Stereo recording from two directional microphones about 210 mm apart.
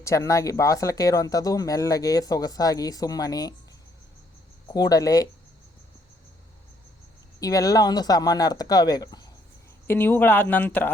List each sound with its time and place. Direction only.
0.0 s speech: 15° left (ahead or behind)
4.7 s speech: 20° left (ahead or behind)
7.3 s speech: 15° left (ahead or behind)